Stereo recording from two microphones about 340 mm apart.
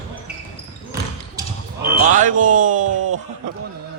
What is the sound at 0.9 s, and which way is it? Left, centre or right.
Basketball bounce, centre.